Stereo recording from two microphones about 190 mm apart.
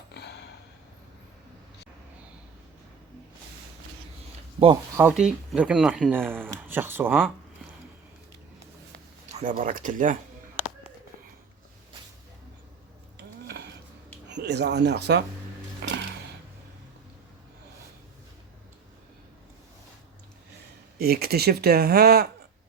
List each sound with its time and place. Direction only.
0.1 s a sound: 60° left (ahead or behind)
4.9 s speech: 5° right (ahead or behind)
9.3 s speech: 45° right (ahead or behind)
14.3 s speech: 65° right (ahead or behind)
15.8 s a sound: 65° right (ahead or behind)
21.0 s speech: 55° right (ahead or behind)